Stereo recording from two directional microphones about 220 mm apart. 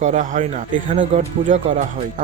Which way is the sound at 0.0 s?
35° right (ahead or behind).